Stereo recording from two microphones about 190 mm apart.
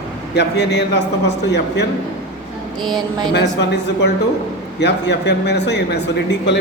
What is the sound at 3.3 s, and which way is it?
Speech, 65° left (ahead or behind).